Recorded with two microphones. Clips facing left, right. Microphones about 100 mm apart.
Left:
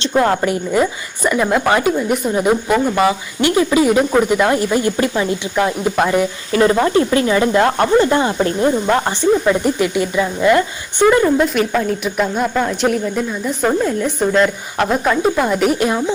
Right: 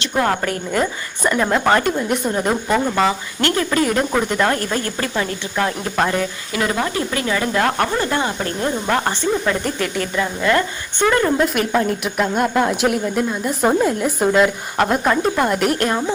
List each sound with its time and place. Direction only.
0.1 s a woman's voice: 15° left (ahead or behind)
6.5 s speech: 30° left (ahead or behind); by 16.0 s 5° left (ahead or behind)